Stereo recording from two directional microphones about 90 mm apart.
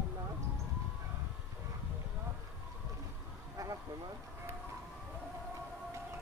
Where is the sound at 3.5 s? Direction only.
40° right (ahead or behind).